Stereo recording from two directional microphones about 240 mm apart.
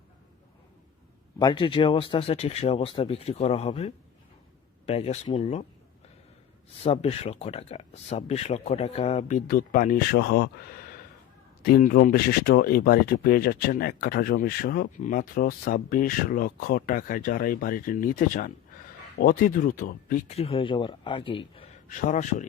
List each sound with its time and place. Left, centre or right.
1.4 s speech: centre
6.8 s speech: left
11.6 s speech: left
20.3 s speech: left